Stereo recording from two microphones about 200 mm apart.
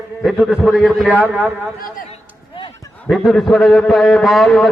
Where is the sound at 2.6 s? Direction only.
25° left (ahead or behind).